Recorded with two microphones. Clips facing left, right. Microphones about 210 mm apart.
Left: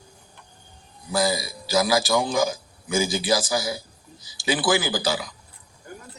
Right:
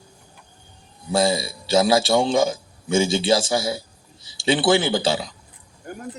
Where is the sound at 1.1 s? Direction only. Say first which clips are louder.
Right 4 dB; 25° right (ahead or behind).